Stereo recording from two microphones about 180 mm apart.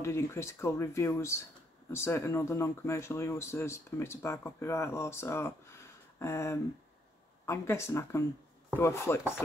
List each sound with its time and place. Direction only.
0.0 s speech: 15° left (ahead or behind)